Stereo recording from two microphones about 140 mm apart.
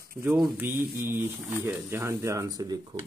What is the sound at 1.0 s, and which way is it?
Speech, 15° right (ahead or behind).